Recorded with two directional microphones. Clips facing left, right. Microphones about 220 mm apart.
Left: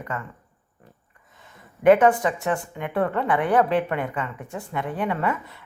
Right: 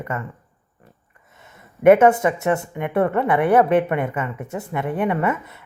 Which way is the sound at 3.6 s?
55° right (ahead or behind).